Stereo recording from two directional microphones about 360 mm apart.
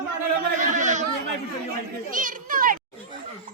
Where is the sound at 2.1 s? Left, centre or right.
Right.